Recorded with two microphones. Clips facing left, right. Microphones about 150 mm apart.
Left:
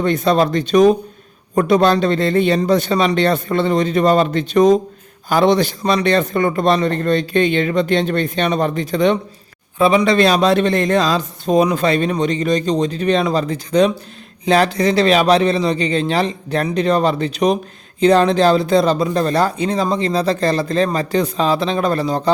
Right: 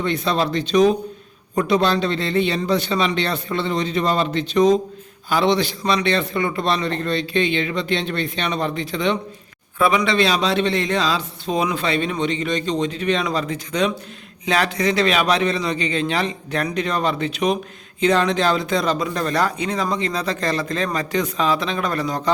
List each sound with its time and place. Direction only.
0.0 s a man's voice: 45° left (ahead or behind)
9.7 s speech: 30° left (ahead or behind)
10.2 s a man's voice: 50° left (ahead or behind); by 22.3 s 30° left (ahead or behind)